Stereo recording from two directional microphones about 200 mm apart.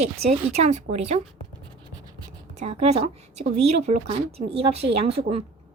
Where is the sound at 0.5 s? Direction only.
35° right (ahead or behind).